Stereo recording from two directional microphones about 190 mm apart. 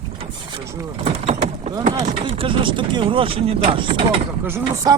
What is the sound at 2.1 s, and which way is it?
Speech, 30° right (ahead or behind).